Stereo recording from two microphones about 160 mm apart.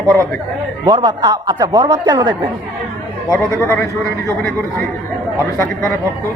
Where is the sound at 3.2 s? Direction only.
15° left (ahead or behind).